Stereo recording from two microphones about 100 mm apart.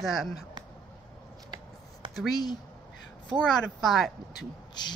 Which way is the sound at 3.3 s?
5° left (ahead or behind).